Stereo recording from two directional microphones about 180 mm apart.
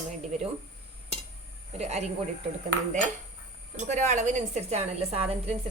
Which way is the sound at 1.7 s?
35° right (ahead or behind).